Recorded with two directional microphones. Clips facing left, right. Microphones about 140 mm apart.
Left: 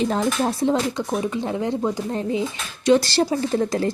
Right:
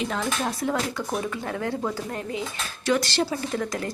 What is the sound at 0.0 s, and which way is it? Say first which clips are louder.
Speech: left 6 dB; 35° left (ahead or behind).